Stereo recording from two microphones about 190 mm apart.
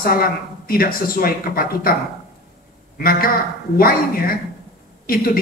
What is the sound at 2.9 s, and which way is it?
A man's voice, 50° left (ahead or behind).